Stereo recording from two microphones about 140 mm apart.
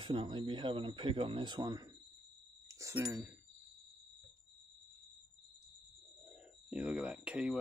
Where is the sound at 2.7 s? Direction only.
20° right (ahead or behind).